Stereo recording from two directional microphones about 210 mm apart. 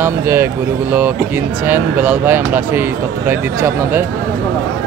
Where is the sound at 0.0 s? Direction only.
10° right (ahead or behind).